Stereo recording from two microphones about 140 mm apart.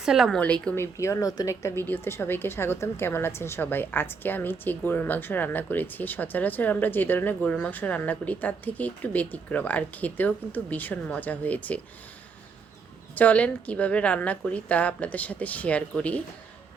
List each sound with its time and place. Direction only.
0.0 s a woman's voice: 5° right (ahead or behind)
0.3 s a woman's voice: 10° left (ahead or behind)
0.9 s a woman's voice: 20° left (ahead or behind)
13.1 s a woman's voice: 10° left (ahead or behind)